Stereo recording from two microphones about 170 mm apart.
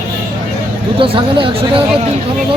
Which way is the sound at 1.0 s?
30° right (ahead or behind).